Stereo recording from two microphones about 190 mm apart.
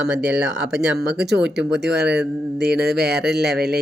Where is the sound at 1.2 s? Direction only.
60° right (ahead or behind).